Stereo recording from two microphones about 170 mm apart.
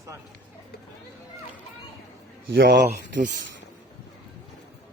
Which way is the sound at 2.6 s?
90° right.